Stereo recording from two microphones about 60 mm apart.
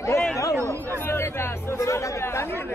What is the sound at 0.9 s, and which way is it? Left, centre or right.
Chatter, left.